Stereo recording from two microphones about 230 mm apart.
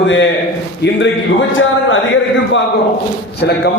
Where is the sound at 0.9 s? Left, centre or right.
Left.